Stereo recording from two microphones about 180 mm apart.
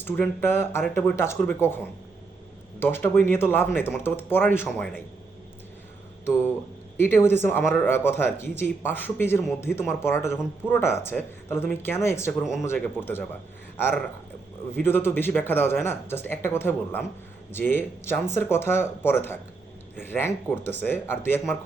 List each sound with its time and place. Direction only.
0.0 s speech: 10° left (ahead or behind)
2.7 s speech: 10° left (ahead or behind)
6.9 s speech: 10° left (ahead or behind)
12.4 s speech: centre (ahead or behind)
12.6 s speech: 10° left (ahead or behind)
14.7 s speech: 10° left (ahead or behind)